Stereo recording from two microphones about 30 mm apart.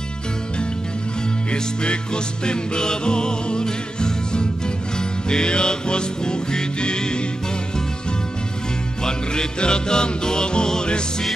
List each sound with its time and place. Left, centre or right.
1.5 s music: left
9.0 s music: left